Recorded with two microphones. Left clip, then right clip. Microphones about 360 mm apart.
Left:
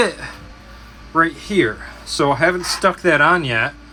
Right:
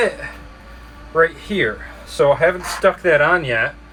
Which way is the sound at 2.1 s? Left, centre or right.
Centre.